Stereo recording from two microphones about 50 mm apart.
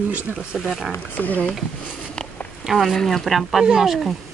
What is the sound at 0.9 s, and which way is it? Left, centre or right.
Speech, left.